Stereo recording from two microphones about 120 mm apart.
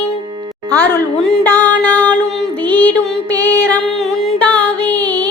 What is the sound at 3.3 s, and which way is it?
Music, 15° left (ahead or behind).